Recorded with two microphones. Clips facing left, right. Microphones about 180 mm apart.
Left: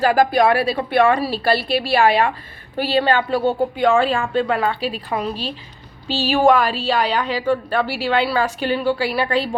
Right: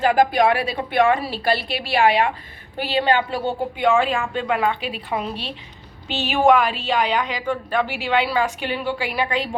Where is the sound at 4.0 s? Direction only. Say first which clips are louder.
Left 3 dB; 35° left (ahead or behind).